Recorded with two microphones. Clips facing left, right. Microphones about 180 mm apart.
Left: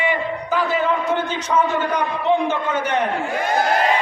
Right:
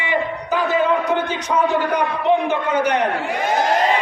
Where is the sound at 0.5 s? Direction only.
15° right (ahead or behind).